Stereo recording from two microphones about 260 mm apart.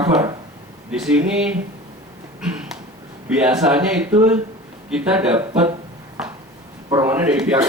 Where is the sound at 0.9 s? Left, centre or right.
Centre.